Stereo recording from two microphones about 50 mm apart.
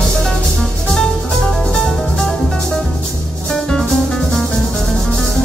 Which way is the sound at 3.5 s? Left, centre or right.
Centre.